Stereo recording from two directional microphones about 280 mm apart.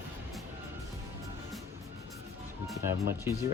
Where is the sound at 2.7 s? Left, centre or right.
Centre.